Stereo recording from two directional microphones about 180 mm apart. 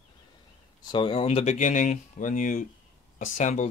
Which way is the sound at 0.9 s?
30° left (ahead or behind).